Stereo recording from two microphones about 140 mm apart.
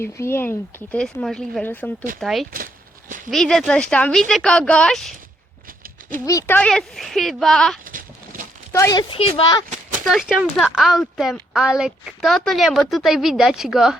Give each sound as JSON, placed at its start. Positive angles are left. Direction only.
{"t": 0.0, "sound": "speech", "side_deg": 15}
{"t": 2.2, "sound": "a woman's voice", "side_deg": 0}
{"t": 6.1, "sound": "speech", "side_deg": 20}
{"t": 6.6, "sound": "a woman's voice", "side_deg": 5}
{"t": 7.9, "sound": "a sound", "side_deg": -70}
{"t": 8.7, "sound": "speech", "side_deg": 20}
{"t": 9.0, "sound": "speech", "side_deg": 40}
{"t": 10.1, "sound": "a woman's voice", "side_deg": -5}